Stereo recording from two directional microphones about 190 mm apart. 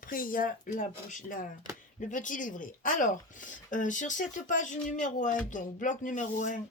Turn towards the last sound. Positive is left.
turn(degrees=40)  # may be behind; listen again after turning